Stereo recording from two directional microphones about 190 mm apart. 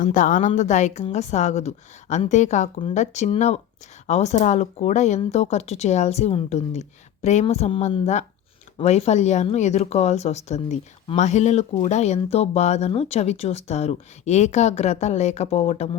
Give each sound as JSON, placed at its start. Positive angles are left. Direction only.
{"t": 0.0, "sound": "speech", "side_deg": 40}